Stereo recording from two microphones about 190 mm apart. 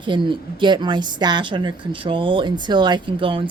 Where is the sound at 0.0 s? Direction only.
25° right (ahead or behind).